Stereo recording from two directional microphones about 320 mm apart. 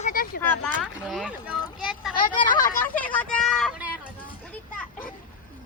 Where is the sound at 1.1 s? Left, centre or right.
Centre.